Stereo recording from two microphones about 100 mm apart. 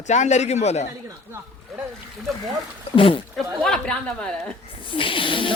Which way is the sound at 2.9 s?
65° left (ahead or behind).